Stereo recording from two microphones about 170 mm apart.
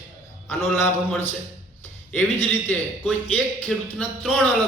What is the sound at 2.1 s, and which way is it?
A man's voice, 10° left (ahead or behind).